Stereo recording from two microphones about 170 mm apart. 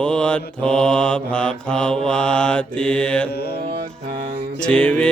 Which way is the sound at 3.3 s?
75° left (ahead or behind).